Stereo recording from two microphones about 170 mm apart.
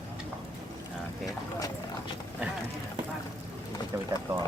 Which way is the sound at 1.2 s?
20° left (ahead or behind).